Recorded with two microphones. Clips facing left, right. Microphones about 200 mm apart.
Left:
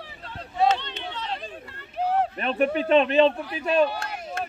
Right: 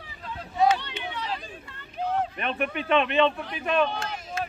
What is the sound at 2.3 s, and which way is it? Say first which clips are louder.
Speech: left 6 dB; 35° left (ahead or behind).